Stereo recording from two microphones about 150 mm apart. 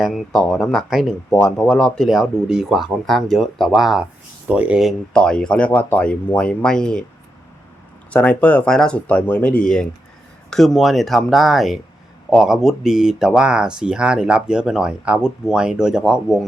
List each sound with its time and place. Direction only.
0.0 s speech: centre (ahead or behind)
8.1 s speech: 10° left (ahead or behind)